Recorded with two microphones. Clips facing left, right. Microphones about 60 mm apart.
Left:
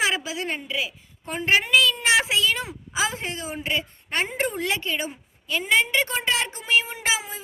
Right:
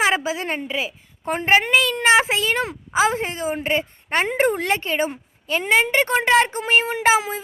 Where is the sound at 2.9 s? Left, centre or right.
Right.